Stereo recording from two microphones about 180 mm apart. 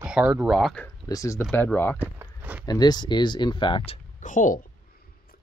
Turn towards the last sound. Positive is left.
turn(degrees=45)  # may be behind; listen again after turning